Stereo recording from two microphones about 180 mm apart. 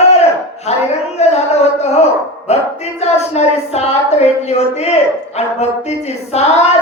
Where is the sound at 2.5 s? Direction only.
35° left (ahead or behind).